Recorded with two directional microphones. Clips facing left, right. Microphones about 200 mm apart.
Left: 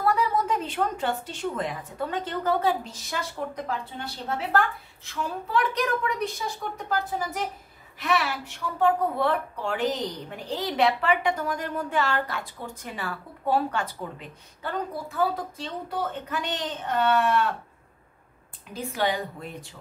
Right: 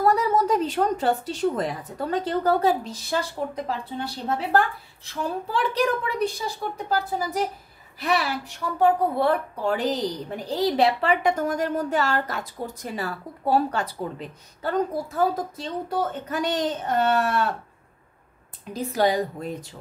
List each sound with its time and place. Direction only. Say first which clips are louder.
0.0 s a woman's voice: right 4 dB; 40° right (ahead or behind)
5.1 s a woman's voice: right 1 dB; 30° right (ahead or behind)
18.7 s a woman's voice: right 5 dB; 40° right (ahead or behind)